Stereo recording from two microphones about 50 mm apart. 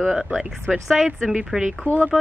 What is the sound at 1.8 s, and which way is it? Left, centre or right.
Speech, left.